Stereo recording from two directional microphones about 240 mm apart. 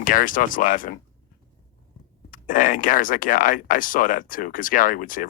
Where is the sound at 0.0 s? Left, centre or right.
Left.